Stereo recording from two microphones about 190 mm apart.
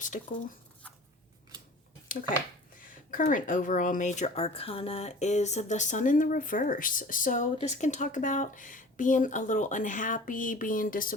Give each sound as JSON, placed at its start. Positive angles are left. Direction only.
{"t": 0.0, "sound": "speech", "side_deg": 40}
{"t": 3.1, "sound": "a woman's voice", "side_deg": 45}